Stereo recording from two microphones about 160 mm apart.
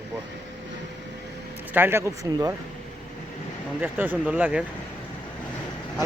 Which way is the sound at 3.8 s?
10° right (ahead or behind).